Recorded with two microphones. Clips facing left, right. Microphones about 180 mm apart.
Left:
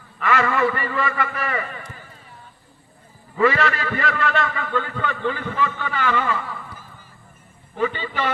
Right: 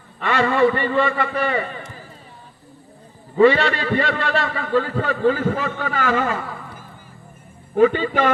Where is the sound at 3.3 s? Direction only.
30° right (ahead or behind).